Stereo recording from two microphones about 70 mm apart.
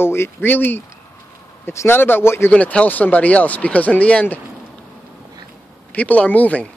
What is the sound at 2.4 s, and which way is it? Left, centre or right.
Speech, centre.